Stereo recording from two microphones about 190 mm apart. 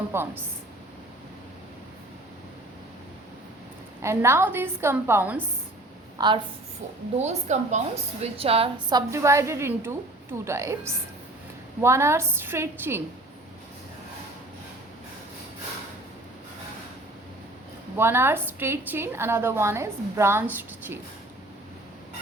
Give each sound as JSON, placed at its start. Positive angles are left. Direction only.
{"t": 0.1, "sound": "a woman's voice", "side_deg": -10}
{"t": 4.0, "sound": "a woman's voice", "side_deg": -15}
{"t": 6.1, "sound": "a woman's voice", "side_deg": -25}
{"t": 7.2, "sound": "a woman's voice", "side_deg": -35}
{"t": 17.9, "sound": "a woman's voice", "side_deg": -10}